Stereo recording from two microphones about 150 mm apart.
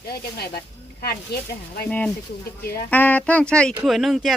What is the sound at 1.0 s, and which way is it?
Speech, 90° left.